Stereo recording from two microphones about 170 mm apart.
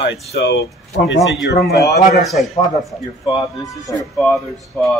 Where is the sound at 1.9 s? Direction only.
55° left (ahead or behind).